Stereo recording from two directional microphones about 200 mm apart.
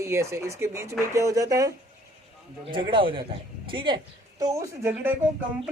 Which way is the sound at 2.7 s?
25° right (ahead or behind).